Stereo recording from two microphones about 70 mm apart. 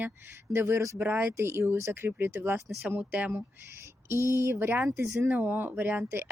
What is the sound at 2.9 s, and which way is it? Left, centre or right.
Speech, right.